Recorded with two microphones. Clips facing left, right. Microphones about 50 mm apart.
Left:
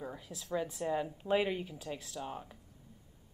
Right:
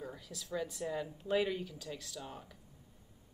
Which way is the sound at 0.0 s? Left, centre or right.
Left.